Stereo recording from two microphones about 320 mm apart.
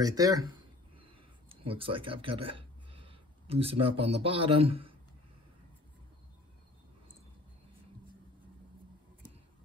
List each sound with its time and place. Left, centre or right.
0.0 s speech: centre
1.5 s a sound: centre
4.0 s speech: centre